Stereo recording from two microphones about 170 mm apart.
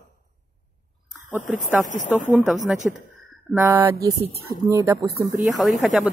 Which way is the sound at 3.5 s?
15° right (ahead or behind).